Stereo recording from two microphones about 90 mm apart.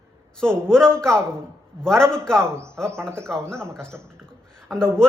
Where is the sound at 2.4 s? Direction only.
30° right (ahead or behind).